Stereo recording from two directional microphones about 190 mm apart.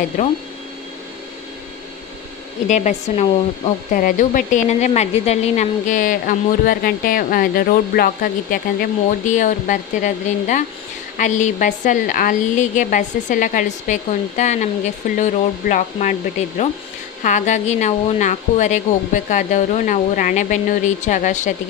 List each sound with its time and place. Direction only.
2.7 s speech: 35° left (ahead or behind)
9.2 s a woman's voice: 40° left (ahead or behind)